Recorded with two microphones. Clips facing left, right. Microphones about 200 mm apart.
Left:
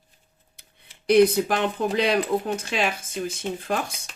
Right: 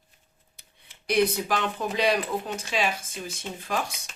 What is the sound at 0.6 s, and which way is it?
Speech, 55° left (ahead or behind).